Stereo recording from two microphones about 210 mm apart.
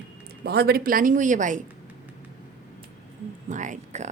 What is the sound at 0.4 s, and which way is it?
Speech, 50° right (ahead or behind).